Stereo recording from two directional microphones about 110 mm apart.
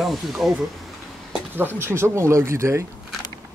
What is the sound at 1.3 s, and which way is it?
Speech, 20° right (ahead or behind).